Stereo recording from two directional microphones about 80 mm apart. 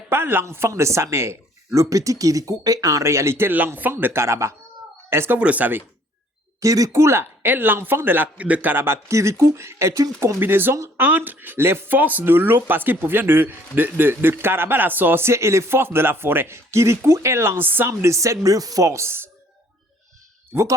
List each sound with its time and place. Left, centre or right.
0.1 s speech: right
5.4 s speech: centre
6.6 s speech: right
10.4 s speech: right
20.5 s speech: right